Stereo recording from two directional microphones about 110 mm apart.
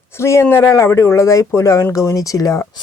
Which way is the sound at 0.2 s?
25° left (ahead or behind).